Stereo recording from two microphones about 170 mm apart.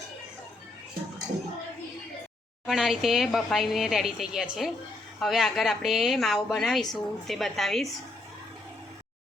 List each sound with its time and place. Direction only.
2.6 s speech: centre (ahead or behind)